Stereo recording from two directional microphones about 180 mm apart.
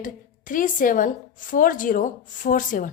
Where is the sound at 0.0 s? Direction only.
50° left (ahead or behind).